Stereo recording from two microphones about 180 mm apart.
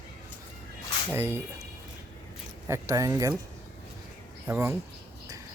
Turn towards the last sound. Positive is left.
turn(degrees=-15)  # may be behind; listen again after turning